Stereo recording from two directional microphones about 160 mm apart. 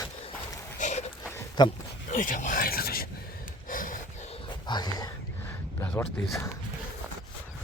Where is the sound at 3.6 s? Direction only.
55° left (ahead or behind); by 5.1 s 25° left (ahead or behind).